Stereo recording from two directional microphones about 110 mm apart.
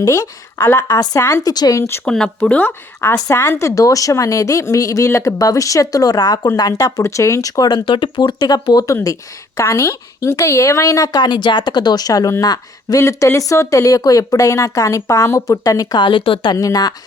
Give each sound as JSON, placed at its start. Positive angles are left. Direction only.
{"t": 0.0, "sound": "speech", "side_deg": 25}
{"t": 0.8, "sound": "speech", "side_deg": 35}
{"t": 2.0, "sound": "speech", "side_deg": 5}
{"t": 9.6, "sound": "speech", "side_deg": 25}
{"t": 16.6, "sound": "speech", "side_deg": 35}